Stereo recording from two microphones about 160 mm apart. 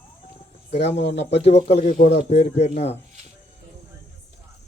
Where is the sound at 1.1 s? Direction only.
40° left (ahead or behind).